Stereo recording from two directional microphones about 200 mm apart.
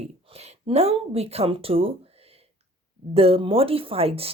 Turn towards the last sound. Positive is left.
turn(degrees=-30)  # may be behind; listen again after turning